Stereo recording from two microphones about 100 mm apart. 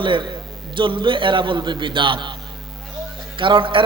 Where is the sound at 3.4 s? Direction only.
55° right (ahead or behind).